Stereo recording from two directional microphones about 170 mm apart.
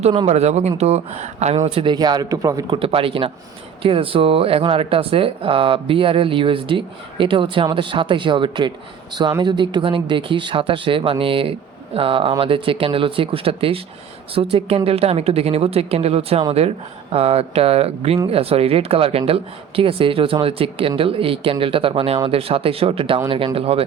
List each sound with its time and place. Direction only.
0.0 s speech: 35° right (ahead or behind)